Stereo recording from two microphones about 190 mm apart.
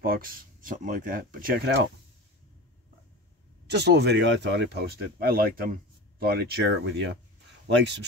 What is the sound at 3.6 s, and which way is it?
Speech, 60° right (ahead or behind).